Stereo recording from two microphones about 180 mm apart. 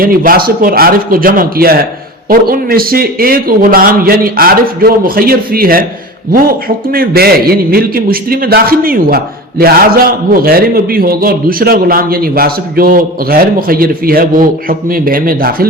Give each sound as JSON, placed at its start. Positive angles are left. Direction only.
{"t": 0.0, "sound": "a man's voice", "side_deg": -55}